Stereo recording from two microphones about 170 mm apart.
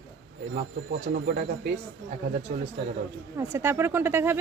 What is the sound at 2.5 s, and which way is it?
Speech, 55° right (ahead or behind).